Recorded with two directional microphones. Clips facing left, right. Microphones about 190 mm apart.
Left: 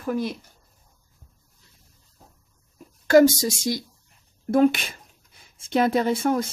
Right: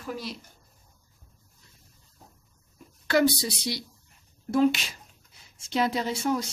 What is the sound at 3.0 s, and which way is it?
Speech, 45° left (ahead or behind).